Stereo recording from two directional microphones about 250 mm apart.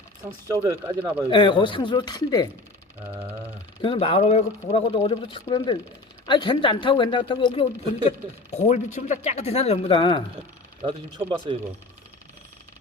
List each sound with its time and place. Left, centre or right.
0.4 s speech: centre
1.3 s speech: centre
3.8 s speech: left
10.8 s speech: centre